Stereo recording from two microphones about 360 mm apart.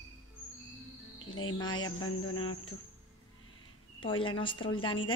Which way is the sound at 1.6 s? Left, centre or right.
Centre.